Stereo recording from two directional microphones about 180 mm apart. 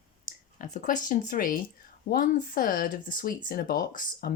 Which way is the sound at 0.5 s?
45° left (ahead or behind).